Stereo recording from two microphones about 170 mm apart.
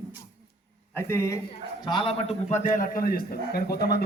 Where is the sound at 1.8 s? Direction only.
30° left (ahead or behind); by 4.0 s 65° left (ahead or behind).